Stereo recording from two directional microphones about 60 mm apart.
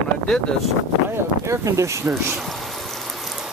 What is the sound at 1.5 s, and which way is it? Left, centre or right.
Speech, right.